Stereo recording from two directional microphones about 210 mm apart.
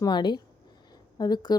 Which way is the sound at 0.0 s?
20° left (ahead or behind).